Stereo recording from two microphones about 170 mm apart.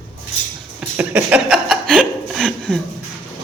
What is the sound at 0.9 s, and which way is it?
Chuckle, 10° right (ahead or behind).